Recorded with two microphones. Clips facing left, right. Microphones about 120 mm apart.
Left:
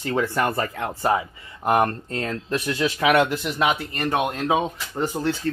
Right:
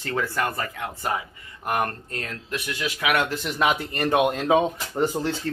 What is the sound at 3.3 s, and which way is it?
Speech, 5° left (ahead or behind).